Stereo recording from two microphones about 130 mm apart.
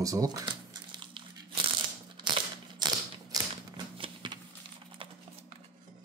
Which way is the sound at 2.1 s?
35° right (ahead or behind).